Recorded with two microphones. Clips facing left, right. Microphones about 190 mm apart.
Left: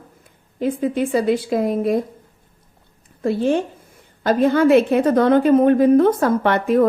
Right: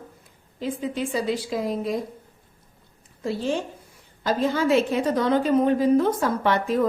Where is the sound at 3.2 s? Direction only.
55° left (ahead or behind).